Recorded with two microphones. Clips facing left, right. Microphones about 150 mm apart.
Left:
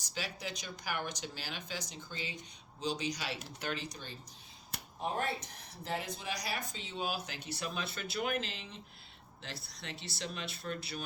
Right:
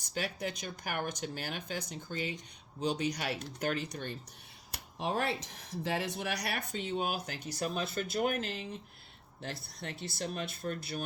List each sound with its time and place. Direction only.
0.0 s speech: 55° right (ahead or behind)
4.9 s speech: 90° right; by 11.0 s 50° right (ahead or behind)